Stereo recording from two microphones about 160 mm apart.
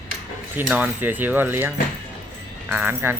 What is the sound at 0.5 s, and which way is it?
Speech, 10° right (ahead or behind).